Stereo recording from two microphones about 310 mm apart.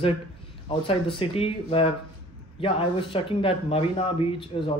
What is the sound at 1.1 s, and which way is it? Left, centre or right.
Speech, centre.